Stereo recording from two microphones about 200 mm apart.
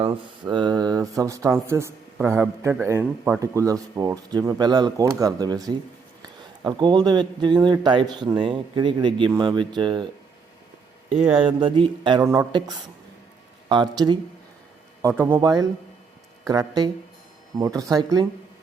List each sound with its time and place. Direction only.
0.0 s speech: 25° right (ahead or behind)
11.3 s speech: 25° right (ahead or behind)